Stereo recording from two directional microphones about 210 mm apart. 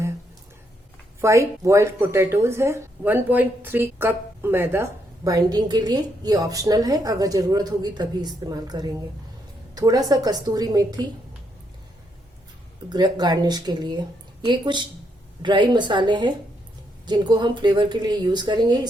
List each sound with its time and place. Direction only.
1.2 s speech: 15° right (ahead or behind)
12.9 s speech: 20° right (ahead or behind)